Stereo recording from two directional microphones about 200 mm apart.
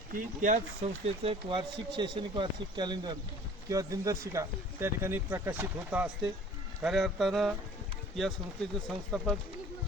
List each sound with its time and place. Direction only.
0.1 s a man's voice: 40° right (ahead or behind); by 7.5 s centre (ahead or behind)
9.1 s a man's voice: centre (ahead or behind)